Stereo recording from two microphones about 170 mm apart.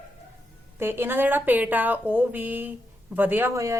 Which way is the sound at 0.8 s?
15° right (ahead or behind).